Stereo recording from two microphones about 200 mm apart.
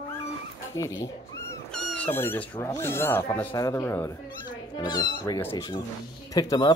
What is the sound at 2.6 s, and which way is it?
Speech, 15° left (ahead or behind).